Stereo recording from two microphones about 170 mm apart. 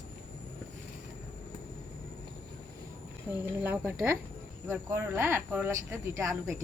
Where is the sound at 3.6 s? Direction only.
10° right (ahead or behind).